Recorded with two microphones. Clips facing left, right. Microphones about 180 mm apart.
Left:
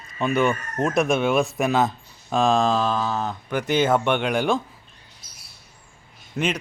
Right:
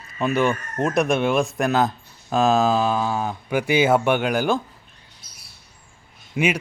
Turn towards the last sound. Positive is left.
turn(degrees=-10)  # may be behind; listen again after turning